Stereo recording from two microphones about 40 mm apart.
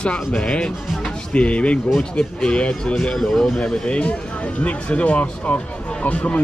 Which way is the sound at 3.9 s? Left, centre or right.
Left.